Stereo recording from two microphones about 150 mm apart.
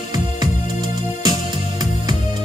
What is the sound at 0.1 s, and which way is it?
Music, 30° right (ahead or behind).